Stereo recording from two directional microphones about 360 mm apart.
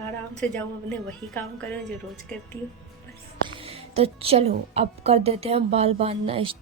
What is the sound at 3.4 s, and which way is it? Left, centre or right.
A woman's voice, centre.